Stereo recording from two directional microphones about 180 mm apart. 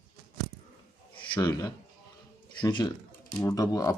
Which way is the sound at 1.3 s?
20° left (ahead or behind).